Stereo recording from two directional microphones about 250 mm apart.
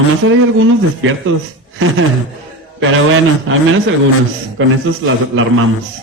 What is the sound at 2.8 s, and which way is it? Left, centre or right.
A man's voice, right.